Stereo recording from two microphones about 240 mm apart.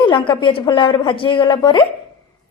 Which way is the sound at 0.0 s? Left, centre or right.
Centre.